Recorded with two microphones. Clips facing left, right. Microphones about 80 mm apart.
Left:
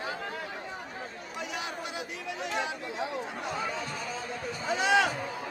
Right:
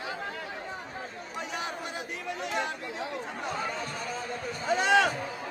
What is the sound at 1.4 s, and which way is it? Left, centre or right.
Chatter, right.